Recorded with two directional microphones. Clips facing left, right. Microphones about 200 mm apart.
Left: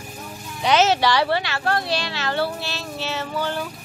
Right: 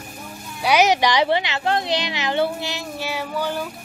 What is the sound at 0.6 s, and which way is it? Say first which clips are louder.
Speech: right 1 dB; 15° right (ahead or behind).